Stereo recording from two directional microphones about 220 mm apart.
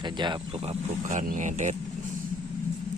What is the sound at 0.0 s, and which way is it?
Speech, 20° right (ahead or behind).